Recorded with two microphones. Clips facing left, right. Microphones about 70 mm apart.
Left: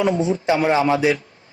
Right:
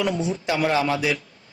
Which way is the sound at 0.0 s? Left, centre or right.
Left.